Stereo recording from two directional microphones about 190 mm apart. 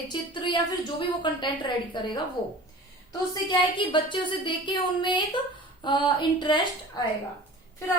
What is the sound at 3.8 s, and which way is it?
A woman's voice, 25° left (ahead or behind).